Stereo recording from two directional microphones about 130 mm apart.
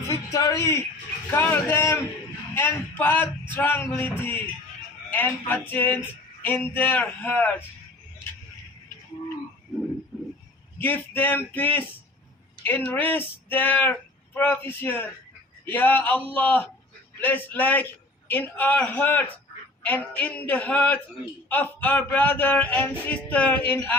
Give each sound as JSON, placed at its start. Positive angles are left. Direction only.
{"t": 0.1, "sound": "a man's voice", "side_deg": 25}
{"t": 10.8, "sound": "speech", "side_deg": 15}